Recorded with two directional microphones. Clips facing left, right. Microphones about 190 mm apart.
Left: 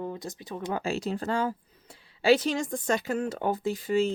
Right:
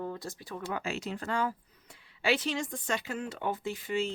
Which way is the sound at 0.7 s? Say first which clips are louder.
Left 6 dB; 35° left (ahead or behind).